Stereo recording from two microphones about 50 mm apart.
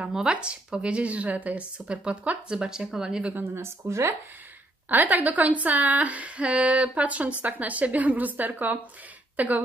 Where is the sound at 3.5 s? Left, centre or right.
Right.